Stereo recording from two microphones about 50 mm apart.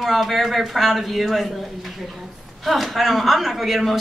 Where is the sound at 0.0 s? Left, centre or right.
Centre.